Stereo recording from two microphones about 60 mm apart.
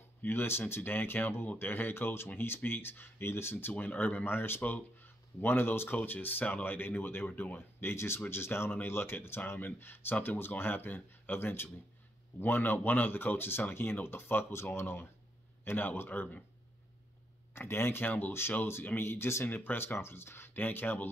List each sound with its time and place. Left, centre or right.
0.2 s speech: left
3.8 s speech: left
17.6 s speech: left